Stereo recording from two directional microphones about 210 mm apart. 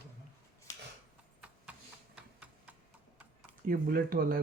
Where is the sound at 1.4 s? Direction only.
5° right (ahead or behind).